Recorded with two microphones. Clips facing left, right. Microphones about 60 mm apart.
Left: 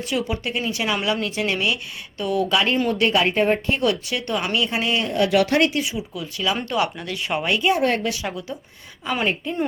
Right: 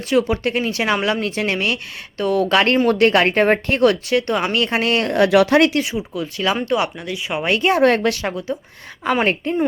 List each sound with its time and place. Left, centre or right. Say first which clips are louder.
0.1 s a woman's voice: right 8 dB; right
2.7 s speech: right 5 dB; right
3.8 s speech: right 10 dB; right
4.5 s speech: right 3 dB; right
5.8 s speech: right 4 dB; right
7.1 s speech: right 1 dB; centre
7.4 s a woman's voice: right 4 dB; right
7.7 s speech: right 7 dB; right
8.3 s speech: right 6 dB; right
9.0 s a woman's voice: right 5 dB; right